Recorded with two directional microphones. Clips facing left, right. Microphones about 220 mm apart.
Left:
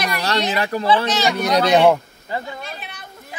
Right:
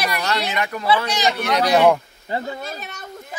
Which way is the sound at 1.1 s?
15° right (ahead or behind).